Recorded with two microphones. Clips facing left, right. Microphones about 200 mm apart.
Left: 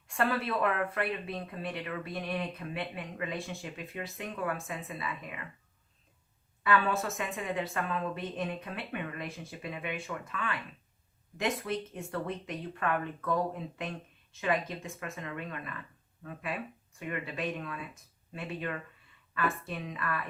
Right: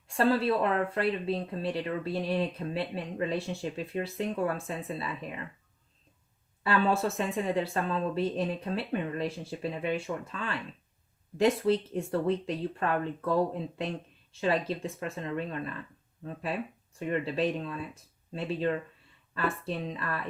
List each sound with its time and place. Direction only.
0.1 s speech: 30° right (ahead or behind)
6.6 s a woman's voice: 30° right (ahead or behind)